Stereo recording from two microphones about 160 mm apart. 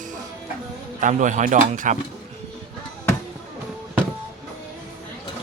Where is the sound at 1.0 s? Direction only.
50° right (ahead or behind).